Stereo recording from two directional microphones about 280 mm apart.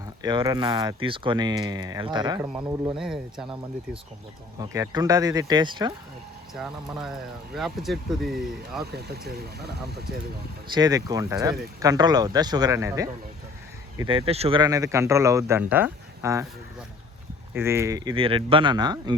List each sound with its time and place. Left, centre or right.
0.0 s speech: centre
4.6 s speech: centre
6.5 s speech: centre
8.8 s speech: right
10.8 s speech: centre
17.5 s speech: centre